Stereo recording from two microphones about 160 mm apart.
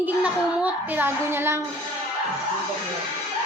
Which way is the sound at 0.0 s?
10° right (ahead or behind).